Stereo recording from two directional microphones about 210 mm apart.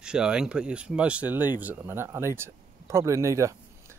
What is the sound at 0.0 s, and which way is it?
Speech, 5° right (ahead or behind).